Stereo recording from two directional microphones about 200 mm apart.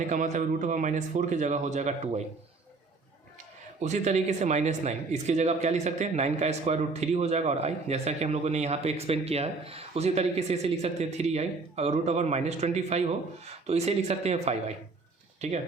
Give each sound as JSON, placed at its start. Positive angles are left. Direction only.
{"t": 0.1, "sound": "speech", "side_deg": -40}
{"t": 3.8, "sound": "speech", "side_deg": -35}